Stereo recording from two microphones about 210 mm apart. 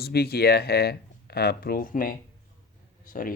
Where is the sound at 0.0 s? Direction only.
50° left (ahead or behind).